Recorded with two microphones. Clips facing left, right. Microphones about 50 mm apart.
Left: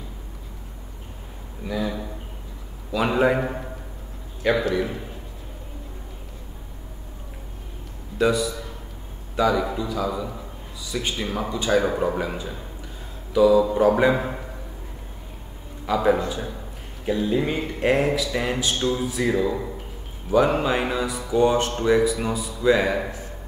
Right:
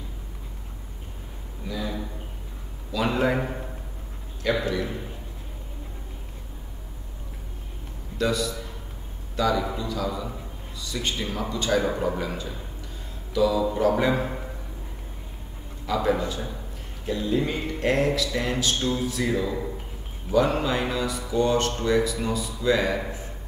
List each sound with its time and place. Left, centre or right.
1.8 s a sound: centre
2.9 s a man's voice: centre
8.2 s speech: centre
15.9 s speech: centre